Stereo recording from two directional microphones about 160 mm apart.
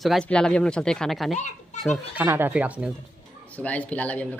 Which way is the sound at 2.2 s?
10° right (ahead or behind).